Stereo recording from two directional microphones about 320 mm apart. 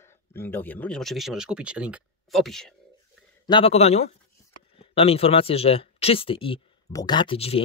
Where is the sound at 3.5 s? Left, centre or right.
Centre.